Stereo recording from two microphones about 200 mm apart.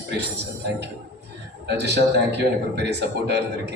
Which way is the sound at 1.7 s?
60° right (ahead or behind).